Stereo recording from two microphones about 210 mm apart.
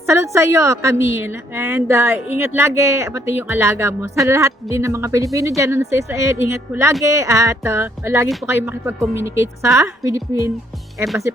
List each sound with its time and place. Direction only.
0.1 s a woman's voice: 15° right (ahead or behind)